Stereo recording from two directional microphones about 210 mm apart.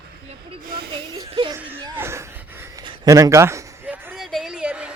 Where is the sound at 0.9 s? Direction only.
25° right (ahead or behind).